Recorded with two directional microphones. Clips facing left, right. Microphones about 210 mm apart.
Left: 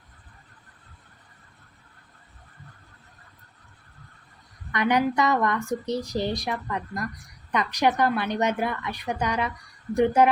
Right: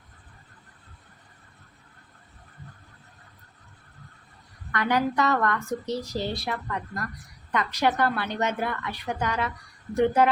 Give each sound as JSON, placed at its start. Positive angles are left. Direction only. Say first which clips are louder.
{"t": 4.7, "sound": "a woman's voice", "louder": "left 2 dB", "side_deg": 15}